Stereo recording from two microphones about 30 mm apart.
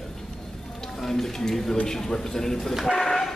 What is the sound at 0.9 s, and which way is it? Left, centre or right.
Speech, centre.